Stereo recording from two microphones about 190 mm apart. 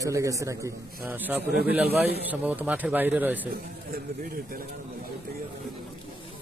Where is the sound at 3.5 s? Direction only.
50° right (ahead or behind).